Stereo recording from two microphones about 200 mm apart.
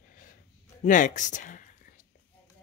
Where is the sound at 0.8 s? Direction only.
40° left (ahead or behind).